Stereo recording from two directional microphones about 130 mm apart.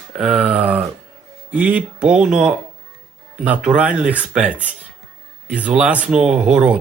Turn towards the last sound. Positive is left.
turn(degrees=-5)  # may be behind; listen again after turning